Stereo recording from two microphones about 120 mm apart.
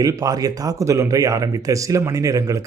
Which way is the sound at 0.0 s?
30° right (ahead or behind).